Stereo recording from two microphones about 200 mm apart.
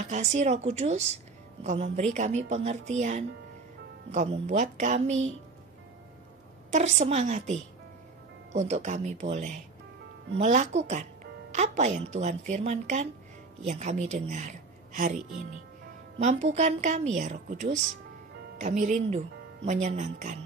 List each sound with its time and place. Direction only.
0.1 s speech: 35° right (ahead or behind)
6.7 s speech: 35° right (ahead or behind)
8.5 s speech: 35° right (ahead or behind)